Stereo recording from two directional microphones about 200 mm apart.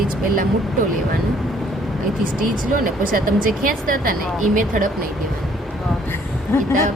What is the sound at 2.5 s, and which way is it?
Speech, 45° right (ahead or behind).